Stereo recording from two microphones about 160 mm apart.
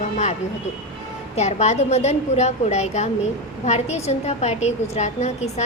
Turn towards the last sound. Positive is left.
turn(degrees=45)  # may be behind; listen again after turning